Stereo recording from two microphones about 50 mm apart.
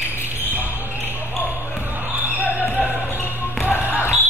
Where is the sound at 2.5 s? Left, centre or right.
Left.